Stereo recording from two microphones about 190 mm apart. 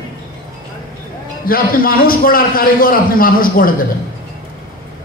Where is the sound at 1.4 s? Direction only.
50° left (ahead or behind).